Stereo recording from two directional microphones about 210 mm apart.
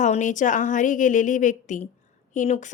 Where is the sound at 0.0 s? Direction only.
35° left (ahead or behind).